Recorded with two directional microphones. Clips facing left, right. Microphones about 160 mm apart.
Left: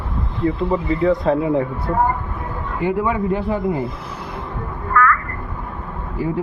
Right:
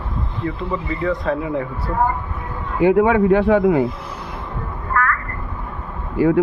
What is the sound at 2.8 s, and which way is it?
Speech, 70° right (ahead or behind).